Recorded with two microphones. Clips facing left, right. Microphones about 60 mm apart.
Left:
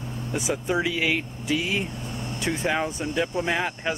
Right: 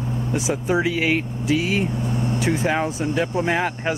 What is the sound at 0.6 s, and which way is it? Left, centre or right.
Speech, right.